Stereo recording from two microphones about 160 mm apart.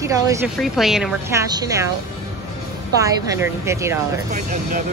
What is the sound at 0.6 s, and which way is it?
Speech, centre (ahead or behind).